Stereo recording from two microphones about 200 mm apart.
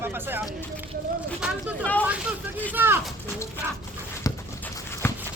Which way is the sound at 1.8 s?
10° left (ahead or behind).